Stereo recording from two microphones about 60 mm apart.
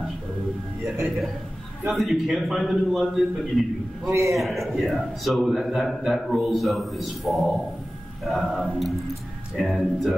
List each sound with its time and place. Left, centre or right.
0.8 s a man's voice: right
1.9 s a man's voice: centre
4.1 s a man's voice: right
4.4 s a man's voice: centre